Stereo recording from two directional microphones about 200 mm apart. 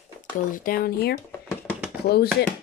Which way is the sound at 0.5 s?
45° left (ahead or behind).